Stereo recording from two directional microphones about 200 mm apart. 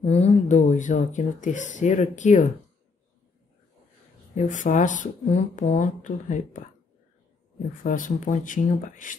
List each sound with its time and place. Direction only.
0.0 s speech: 30° left (ahead or behind)
4.4 s speech: 40° left (ahead or behind)
7.8 s speech: 40° left (ahead or behind)